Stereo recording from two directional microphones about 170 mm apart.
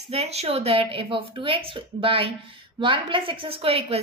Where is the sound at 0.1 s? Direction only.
40° right (ahead or behind).